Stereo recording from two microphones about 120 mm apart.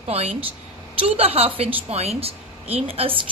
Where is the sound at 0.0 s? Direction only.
55° right (ahead or behind).